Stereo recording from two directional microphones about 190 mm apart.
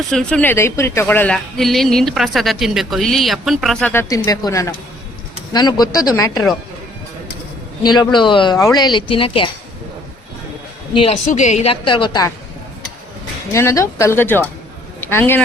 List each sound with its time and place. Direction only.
0.0 s speech: 5° left (ahead or behind); by 6.4 s 20° left (ahead or behind)
7.9 s speech: 25° left (ahead or behind)
10.9 s speech: 35° left (ahead or behind)
13.5 s speech: 15° left (ahead or behind)